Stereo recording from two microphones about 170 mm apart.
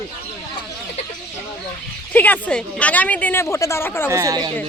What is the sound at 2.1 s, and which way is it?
A woman's voice, 10° left (ahead or behind).